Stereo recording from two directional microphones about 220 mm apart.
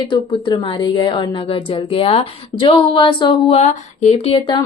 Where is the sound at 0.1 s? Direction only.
20° left (ahead or behind).